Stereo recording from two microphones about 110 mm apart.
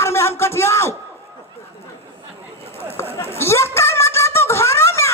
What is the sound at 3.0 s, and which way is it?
Chatter, 25° left (ahead or behind).